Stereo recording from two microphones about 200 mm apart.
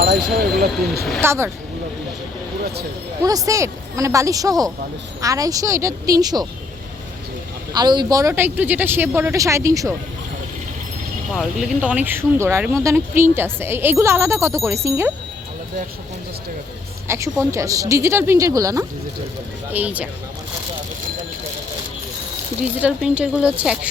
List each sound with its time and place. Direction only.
0.0 s vehicle: 55° right (ahead or behind)
1.2 s a woman's voice: 15° right (ahead or behind)
3.2 s a woman's voice: 15° right (ahead or behind)
7.7 s a woman's voice: 20° right (ahead or behind)
11.3 s a woman's voice: 5° right (ahead or behind)
17.1 s a woman's voice: 15° right (ahead or behind)
22.8 s a woman's voice: 5° right (ahead or behind)